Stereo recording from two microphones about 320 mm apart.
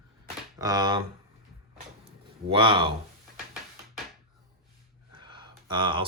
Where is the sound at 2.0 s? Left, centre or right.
Centre.